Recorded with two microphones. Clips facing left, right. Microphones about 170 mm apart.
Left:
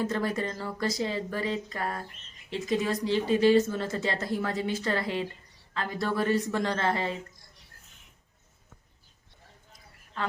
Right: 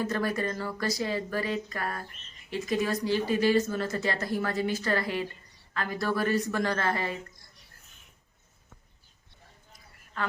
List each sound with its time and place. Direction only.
0.0 s speech: 25° left (ahead or behind)